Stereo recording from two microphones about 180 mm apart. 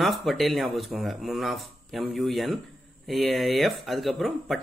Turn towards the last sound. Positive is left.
turn(degrees=0)  # may be behind; listen again after turning